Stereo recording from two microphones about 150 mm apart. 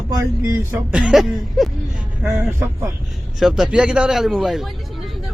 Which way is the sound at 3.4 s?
5° right (ahead or behind).